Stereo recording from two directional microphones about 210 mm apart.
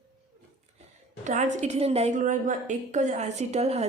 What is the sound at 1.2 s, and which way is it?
A woman's voice, 35° right (ahead or behind).